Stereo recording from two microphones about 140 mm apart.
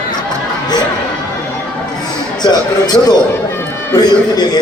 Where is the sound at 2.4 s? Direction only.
30° left (ahead or behind).